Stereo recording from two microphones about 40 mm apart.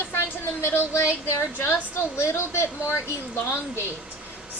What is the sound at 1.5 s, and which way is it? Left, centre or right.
A woman's voice, left.